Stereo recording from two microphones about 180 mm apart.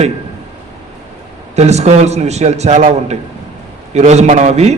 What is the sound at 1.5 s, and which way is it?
A man's voice, 40° right (ahead or behind).